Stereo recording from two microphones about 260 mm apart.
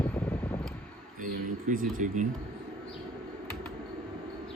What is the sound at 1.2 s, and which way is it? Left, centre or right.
Speech, right.